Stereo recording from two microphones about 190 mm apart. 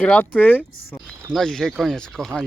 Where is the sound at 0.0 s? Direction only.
5° left (ahead or behind).